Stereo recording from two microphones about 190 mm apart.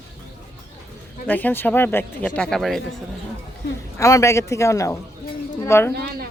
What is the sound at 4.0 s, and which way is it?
Speech, 15° left (ahead or behind).